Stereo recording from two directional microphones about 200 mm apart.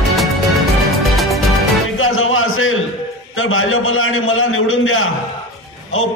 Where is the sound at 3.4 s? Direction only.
90° left.